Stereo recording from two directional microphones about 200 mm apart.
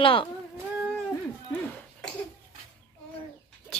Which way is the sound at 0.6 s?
10° right (ahead or behind).